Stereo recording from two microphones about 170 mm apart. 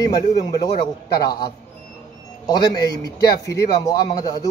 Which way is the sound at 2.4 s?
25° left (ahead or behind).